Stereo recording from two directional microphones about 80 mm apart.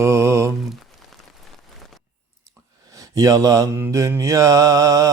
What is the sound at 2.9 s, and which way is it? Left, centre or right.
Speech, right.